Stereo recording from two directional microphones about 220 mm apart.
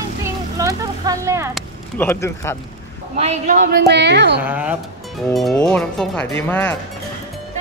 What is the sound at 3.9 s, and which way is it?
Speech, 50° right (ahead or behind).